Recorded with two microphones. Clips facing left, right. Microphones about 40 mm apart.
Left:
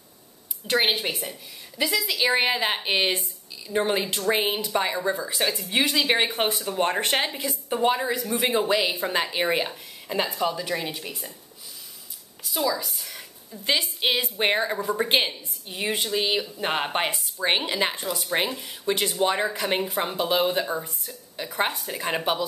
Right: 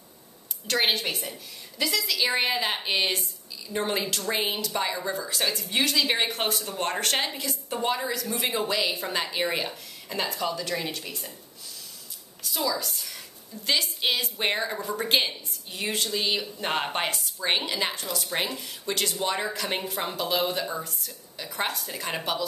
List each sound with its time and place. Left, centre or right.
0.7 s speech: centre
12.6 s a woman's voice: centre